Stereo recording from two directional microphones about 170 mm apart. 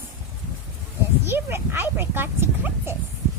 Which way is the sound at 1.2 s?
15° right (ahead or behind).